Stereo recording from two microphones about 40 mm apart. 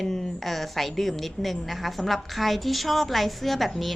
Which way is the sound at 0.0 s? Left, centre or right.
Centre.